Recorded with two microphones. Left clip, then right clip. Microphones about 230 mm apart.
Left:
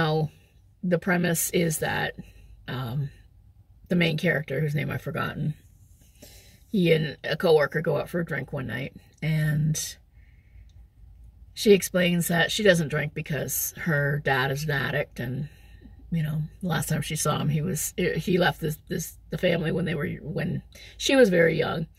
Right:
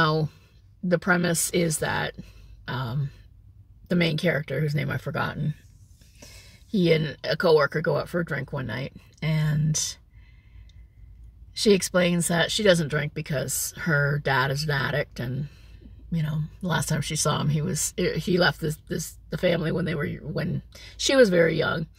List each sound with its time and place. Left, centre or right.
0.0 s a sound: right
1.0 s speech: right
2.6 s throat clearing: right
3.8 s speech: right
6.7 s speech: right
11.5 s speech: right